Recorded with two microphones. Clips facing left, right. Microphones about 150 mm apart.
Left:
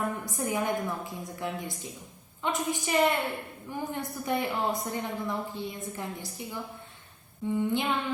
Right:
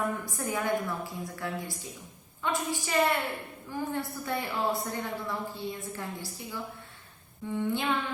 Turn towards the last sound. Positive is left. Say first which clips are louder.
# left 3 dB
turn(degrees=15)  # may be behind; listen again after turning